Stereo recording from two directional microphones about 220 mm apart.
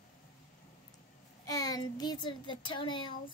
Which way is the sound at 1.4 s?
15° left (ahead or behind).